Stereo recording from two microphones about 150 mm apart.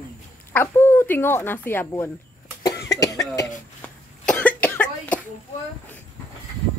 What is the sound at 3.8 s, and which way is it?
Cough, 10° left (ahead or behind).